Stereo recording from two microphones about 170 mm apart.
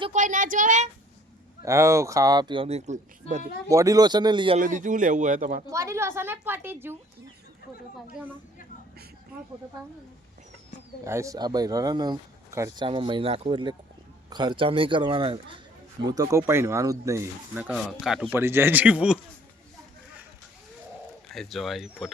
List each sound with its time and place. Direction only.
0.1 s speech: 50° right (ahead or behind)
1.6 s speech: 15° right (ahead or behind); by 3.4 s 45° right (ahead or behind)
3.7 s speech: 20° right (ahead or behind)
4.5 s speech: 50° right (ahead or behind)
5.7 s speech: 15° right (ahead or behind)
11.0 s speech: 15° right (ahead or behind)
21.2 s speech: centre (ahead or behind)